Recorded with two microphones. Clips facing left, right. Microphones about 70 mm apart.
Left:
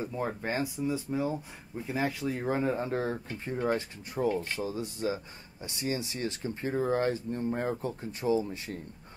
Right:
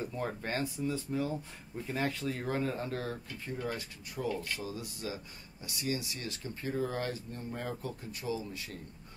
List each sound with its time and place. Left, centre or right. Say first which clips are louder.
0.0 s speech: left 3 dB; centre